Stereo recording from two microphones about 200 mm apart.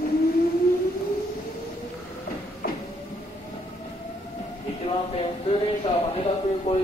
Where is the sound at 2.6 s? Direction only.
50° left (ahead or behind).